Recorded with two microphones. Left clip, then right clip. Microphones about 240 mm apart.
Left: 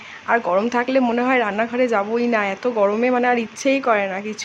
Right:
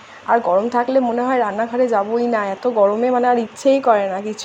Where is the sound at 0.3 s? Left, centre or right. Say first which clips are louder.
Right 3 dB; centre.